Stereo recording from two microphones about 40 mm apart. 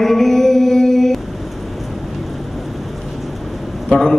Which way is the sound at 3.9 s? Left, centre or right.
Centre.